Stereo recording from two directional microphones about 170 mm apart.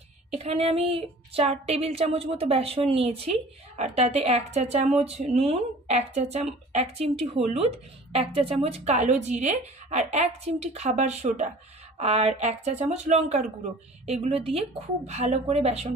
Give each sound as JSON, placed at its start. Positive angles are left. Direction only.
{"t": 0.4, "sound": "a woman's voice", "side_deg": -35}